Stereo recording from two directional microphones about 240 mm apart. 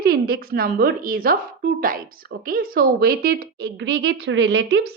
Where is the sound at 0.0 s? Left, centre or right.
Right.